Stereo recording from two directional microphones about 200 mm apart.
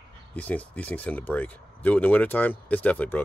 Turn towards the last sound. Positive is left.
turn(degrees=10)  # may be behind; listen again after turning